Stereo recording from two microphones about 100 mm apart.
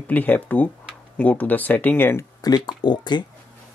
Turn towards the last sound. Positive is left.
turn(degrees=45)  # may be behind; listen again after turning